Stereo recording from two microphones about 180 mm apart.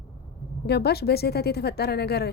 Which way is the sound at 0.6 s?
65° left (ahead or behind).